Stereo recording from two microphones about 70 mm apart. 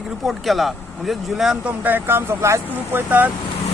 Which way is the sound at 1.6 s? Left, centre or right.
Right.